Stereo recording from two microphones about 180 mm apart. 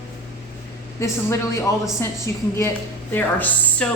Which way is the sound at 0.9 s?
15° left (ahead or behind).